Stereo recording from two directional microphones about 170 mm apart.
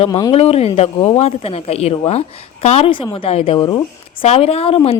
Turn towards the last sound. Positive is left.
turn(degrees=35)  # may be behind; listen again after turning